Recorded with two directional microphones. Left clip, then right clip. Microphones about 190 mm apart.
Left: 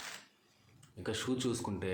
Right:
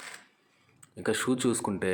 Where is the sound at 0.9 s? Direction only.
50° right (ahead or behind).